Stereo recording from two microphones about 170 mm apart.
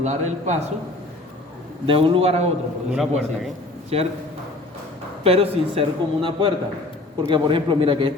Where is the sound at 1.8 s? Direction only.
30° right (ahead or behind).